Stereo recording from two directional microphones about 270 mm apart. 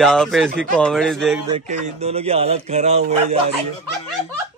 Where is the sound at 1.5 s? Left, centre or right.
Right.